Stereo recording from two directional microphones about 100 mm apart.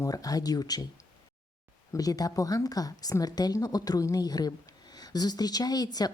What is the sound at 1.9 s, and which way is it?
Speech, 40° left (ahead or behind).